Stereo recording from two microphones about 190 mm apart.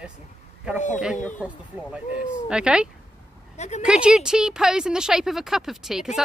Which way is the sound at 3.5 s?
35° left (ahead or behind).